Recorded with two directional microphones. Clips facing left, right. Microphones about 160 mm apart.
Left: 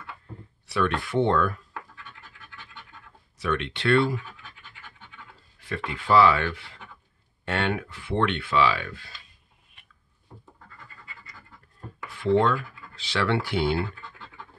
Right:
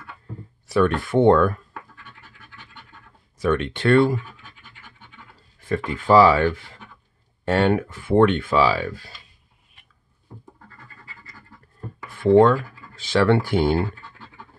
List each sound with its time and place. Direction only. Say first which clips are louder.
0.7 s speech: right 6 dB; 45° right (ahead or behind)
3.3 s speech: right 6 dB; 45° right (ahead or behind)
5.6 s speech: right 7 dB; 45° right (ahead or behind)
12.1 s speech: right 7 dB; 50° right (ahead or behind)